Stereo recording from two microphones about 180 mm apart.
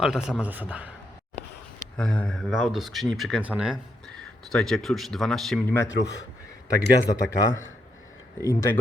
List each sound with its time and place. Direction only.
0.0 s speech: 5° right (ahead or behind)
2.0 s speech: 5° left (ahead or behind)
5.9 s speech: 75° left (ahead or behind)
6.7 s a man's voice: 15° left (ahead or behind)